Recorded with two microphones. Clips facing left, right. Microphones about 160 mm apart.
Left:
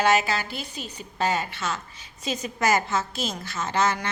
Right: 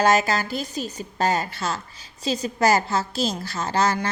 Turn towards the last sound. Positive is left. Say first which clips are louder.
# right 2 dB
turn(degrees=-35)  # may be behind; listen again after turning